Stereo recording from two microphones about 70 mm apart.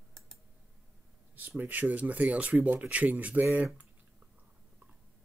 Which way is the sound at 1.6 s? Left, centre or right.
Right.